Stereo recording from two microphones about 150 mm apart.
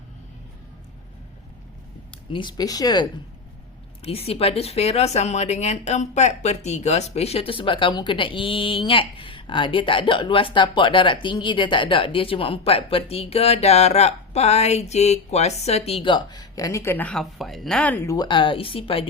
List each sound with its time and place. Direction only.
2.3 s speech: 30° left (ahead or behind)
4.0 s speech: 40° left (ahead or behind); by 18.3 s 20° left (ahead or behind)
18.3 s speech: 35° left (ahead or behind)